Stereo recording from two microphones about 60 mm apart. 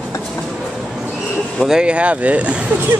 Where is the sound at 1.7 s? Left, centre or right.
Centre.